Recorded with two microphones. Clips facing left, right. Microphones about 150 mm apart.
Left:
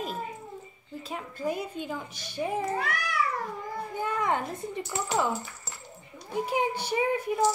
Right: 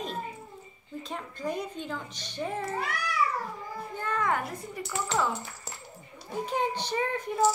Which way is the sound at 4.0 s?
15° left (ahead or behind).